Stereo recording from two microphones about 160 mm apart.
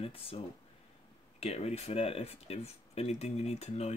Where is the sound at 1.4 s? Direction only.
40° left (ahead or behind).